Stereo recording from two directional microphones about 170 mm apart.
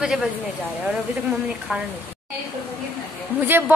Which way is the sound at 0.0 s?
5° right (ahead or behind).